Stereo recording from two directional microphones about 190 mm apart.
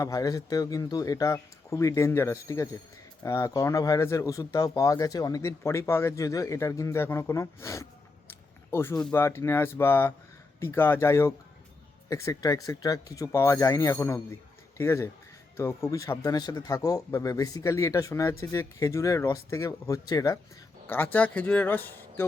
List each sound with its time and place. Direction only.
0.0 s speech: 20° left (ahead or behind)